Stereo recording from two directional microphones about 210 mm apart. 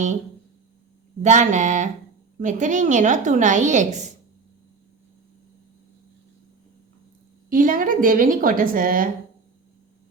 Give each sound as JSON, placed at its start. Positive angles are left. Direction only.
{"t": 1.2, "sound": "a woman's voice", "side_deg": -35}
{"t": 7.5, "sound": "a woman's voice", "side_deg": -40}